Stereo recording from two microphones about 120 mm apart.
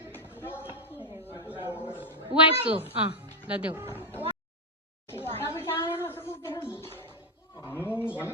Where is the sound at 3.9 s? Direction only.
15° left (ahead or behind).